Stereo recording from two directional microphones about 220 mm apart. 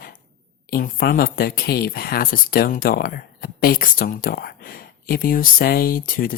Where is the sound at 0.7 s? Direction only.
45° left (ahead or behind).